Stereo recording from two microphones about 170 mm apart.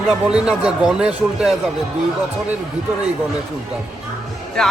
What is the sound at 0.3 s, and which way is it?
Speech, 5° right (ahead or behind).